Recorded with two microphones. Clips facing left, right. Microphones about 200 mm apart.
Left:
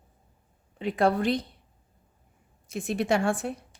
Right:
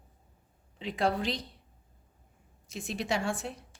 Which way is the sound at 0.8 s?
55° left (ahead or behind).